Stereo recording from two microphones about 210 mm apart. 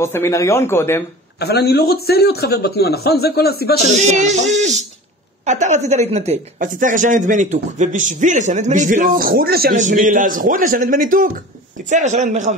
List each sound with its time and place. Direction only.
0.0 s speech: 10° left (ahead or behind)
1.4 s speech: 50° left (ahead or behind)
4.0 s speech: 35° right (ahead or behind)